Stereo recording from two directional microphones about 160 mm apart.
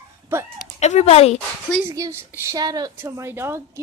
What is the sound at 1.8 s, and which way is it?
A woman's voice, 15° right (ahead or behind).